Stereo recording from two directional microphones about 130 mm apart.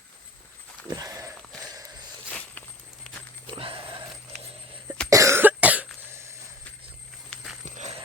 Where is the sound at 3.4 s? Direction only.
45° right (ahead or behind).